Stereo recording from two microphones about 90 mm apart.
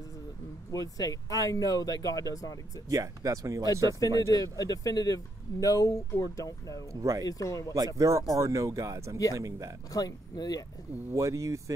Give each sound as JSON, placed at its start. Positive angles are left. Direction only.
{"t": 0.7, "sound": "speech", "side_deg": 40}
{"t": 2.9, "sound": "speech", "side_deg": -40}
{"t": 4.3, "sound": "speech", "side_deg": 40}
{"t": 6.9, "sound": "speech", "side_deg": -35}
{"t": 7.2, "sound": "speech", "side_deg": 40}
{"t": 7.7, "sound": "speech", "side_deg": -40}
{"t": 9.9, "sound": "speech", "side_deg": 45}
{"t": 11.1, "sound": "speech", "side_deg": -35}